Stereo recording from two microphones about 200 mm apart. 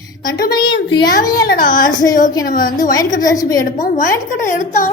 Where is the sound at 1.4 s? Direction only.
45° left (ahead or behind).